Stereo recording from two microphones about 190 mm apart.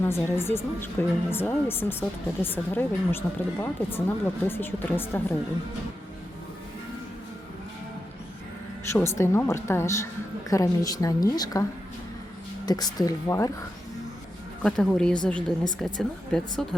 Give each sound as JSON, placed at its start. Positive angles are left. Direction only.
{"t": 0.0, "sound": "speech", "side_deg": 10}
{"t": 8.9, "sound": "speech", "side_deg": 15}
{"t": 12.6, "sound": "speech", "side_deg": 20}
{"t": 14.6, "sound": "a woman's voice", "side_deg": 5}